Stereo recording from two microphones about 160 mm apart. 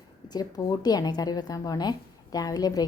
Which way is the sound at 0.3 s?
25° left (ahead or behind).